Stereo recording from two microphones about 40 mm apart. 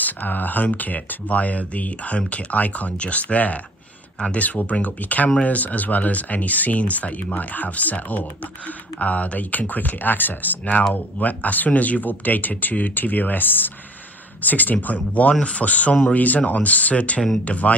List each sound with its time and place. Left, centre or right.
0.0 s speech: left
15.4 s speech: left